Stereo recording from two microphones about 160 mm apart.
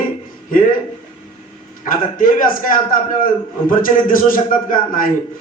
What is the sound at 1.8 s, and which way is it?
A man's voice, 60° left (ahead or behind).